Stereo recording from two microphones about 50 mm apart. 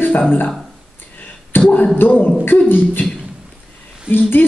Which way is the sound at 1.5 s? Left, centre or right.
Left.